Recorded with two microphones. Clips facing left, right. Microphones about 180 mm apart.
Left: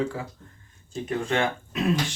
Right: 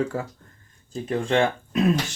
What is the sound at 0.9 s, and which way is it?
Speech, 35° right (ahead or behind).